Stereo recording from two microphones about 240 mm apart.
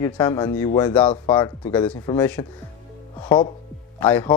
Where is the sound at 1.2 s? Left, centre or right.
Centre.